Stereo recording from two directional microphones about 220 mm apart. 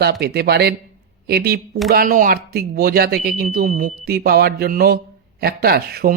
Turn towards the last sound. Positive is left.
turn(degrees=-45)  # may be behind; listen again after turning